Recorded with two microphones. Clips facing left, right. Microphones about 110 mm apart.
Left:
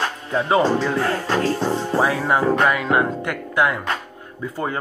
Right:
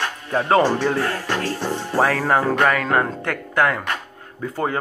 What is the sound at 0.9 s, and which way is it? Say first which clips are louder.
Music: left 2 dB; 25° left (ahead or behind).